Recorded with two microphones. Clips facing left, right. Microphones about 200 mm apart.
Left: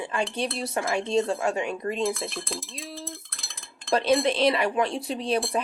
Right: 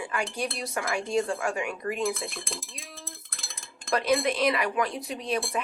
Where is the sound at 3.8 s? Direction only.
30° left (ahead or behind).